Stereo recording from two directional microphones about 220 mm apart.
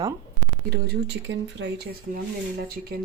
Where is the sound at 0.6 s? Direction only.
45° right (ahead or behind).